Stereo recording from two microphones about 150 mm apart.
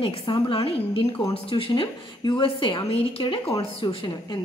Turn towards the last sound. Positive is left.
turn(degrees=35)  # may be behind; listen again after turning